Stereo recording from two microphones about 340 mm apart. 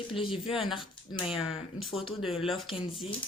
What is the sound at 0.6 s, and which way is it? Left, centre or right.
Speech, centre.